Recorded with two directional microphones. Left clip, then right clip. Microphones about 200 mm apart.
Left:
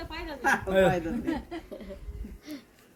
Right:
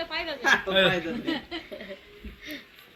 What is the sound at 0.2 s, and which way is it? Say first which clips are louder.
Speech: right 3 dB; 30° left (ahead or behind).